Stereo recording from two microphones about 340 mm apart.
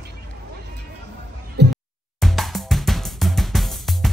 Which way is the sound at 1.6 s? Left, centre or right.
Right.